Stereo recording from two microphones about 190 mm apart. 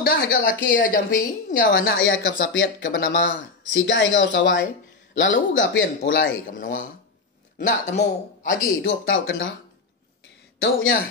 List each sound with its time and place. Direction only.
0.0 s a man's voice: 50° left (ahead or behind)
3.8 s speech: 75° left (ahead or behind)
6.4 s a man's voice: 45° left (ahead or behind)
9.1 s speech: 75° left (ahead or behind)
10.6 s a man's voice: 50° left (ahead or behind)